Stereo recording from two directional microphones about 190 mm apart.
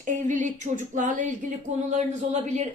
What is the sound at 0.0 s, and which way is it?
Speech, 40° right (ahead or behind).